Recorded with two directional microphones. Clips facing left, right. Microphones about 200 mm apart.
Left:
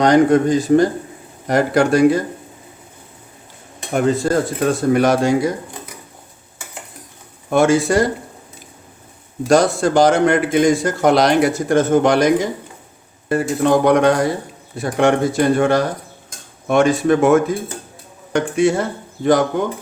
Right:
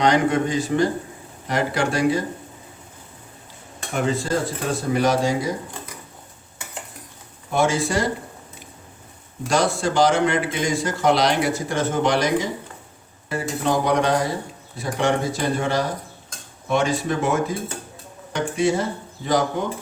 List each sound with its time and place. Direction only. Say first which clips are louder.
0.0 s a man's voice: left 7 dB; 40° left (ahead or behind)
3.9 s speech: left 6 dB; 50° left (ahead or behind)
7.5 s speech: left 7 dB; 50° left (ahead or behind)
9.5 s speech: left 7 dB; 45° left (ahead or behind)